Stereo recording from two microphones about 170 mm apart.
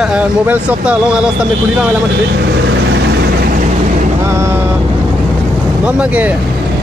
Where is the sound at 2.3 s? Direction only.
85° right.